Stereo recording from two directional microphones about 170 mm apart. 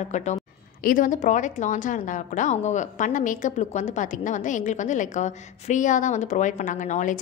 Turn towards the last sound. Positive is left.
turn(degrees=45)  # may be behind; listen again after turning